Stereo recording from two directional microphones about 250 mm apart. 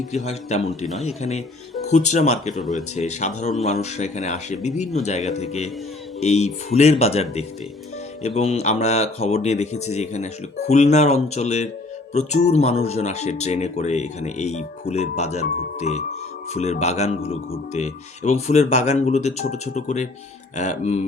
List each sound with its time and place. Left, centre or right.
0.1 s speech: left
2.6 s speech: centre
2.9 s speech: left